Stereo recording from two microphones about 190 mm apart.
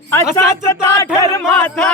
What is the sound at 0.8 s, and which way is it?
Music, 15° left (ahead or behind).